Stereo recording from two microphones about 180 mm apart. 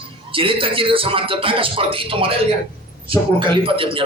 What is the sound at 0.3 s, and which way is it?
A man's voice, 30° right (ahead or behind).